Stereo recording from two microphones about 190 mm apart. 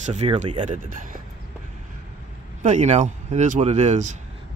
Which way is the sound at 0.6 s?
40° right (ahead or behind).